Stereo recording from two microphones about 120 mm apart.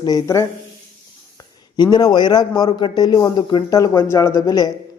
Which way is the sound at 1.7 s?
35° left (ahead or behind).